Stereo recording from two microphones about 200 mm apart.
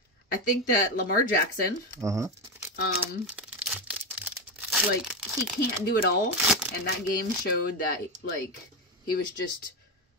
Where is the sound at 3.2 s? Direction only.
5° right (ahead or behind).